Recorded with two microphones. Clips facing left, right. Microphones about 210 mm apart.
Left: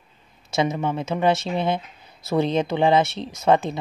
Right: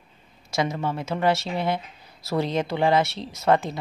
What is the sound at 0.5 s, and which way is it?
A woman's voice, 20° left (ahead or behind).